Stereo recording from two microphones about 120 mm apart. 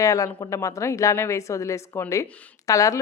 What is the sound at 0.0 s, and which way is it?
A woman's voice, 25° left (ahead or behind).